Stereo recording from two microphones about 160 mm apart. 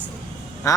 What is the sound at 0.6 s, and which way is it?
Speech, 20° left (ahead or behind).